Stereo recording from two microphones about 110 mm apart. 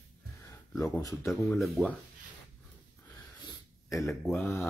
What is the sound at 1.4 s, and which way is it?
Speech, centre (ahead or behind).